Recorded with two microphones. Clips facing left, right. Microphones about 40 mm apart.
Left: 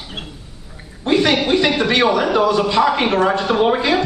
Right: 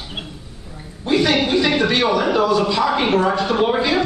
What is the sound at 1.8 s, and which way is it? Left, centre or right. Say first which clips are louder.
Speech: left 2 dB; left.